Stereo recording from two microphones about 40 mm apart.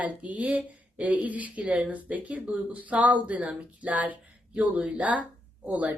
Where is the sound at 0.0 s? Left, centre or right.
Right.